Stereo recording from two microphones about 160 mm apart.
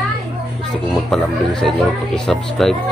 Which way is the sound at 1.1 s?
Centre (ahead or behind).